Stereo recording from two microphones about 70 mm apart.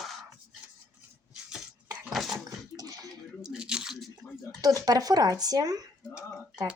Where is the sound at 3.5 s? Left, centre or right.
Centre.